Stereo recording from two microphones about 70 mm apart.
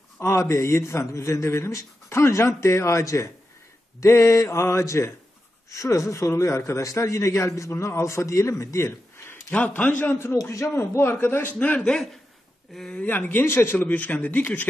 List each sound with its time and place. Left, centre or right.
0.2 s a man's voice: left
9.5 s a man's voice: centre
10.3 s a man's voice: left
10.7 s a man's voice: left
11.8 s speech: centre
13.0 s a man's voice: left
13.8 s a man's voice: left